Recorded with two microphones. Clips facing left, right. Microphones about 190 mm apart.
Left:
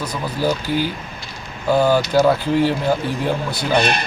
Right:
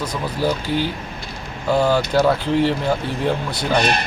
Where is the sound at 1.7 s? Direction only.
5° left (ahead or behind).